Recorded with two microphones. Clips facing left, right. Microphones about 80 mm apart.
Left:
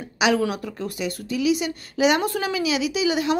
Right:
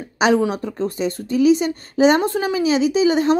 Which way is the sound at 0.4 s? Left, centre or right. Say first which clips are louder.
Right 5 dB; right.